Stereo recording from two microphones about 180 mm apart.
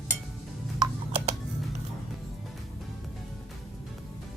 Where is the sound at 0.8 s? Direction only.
35° right (ahead or behind).